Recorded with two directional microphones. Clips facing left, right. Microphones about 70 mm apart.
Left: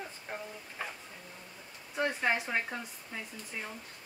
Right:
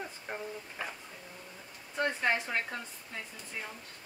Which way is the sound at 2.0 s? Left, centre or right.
Centre.